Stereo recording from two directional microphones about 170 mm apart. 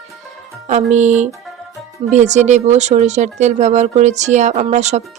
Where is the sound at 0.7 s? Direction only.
45° right (ahead or behind).